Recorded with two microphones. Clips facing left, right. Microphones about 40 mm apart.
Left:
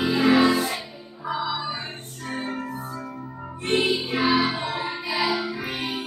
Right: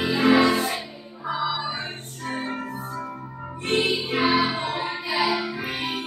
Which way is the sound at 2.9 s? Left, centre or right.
Centre.